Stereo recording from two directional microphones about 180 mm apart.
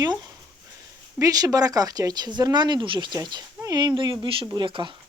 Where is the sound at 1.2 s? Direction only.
20° right (ahead or behind).